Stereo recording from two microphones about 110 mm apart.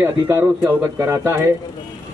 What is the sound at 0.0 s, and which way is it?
A man's voice, 20° right (ahead or behind).